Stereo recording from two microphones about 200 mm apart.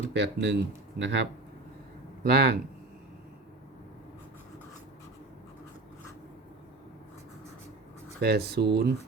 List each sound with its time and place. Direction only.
0.1 s speech: 60° right (ahead or behind)
2.2 s speech: 50° right (ahead or behind)
8.2 s speech: 55° right (ahead or behind)